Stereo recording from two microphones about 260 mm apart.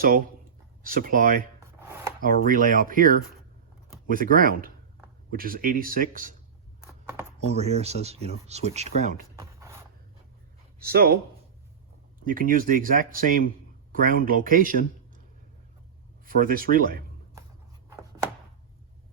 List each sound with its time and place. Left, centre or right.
0.9 s speech: right
1.8 s chopping: centre
2.2 s speech: right
7.4 s speech: right
9.3 s a sound: centre
10.8 s speech: right
12.2 s speech: right
16.2 s speech: right